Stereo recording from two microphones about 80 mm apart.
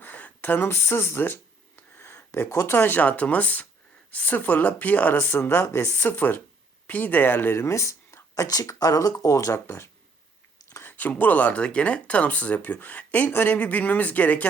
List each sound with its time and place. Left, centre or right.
0.0 s speech: left
10.8 s speech: left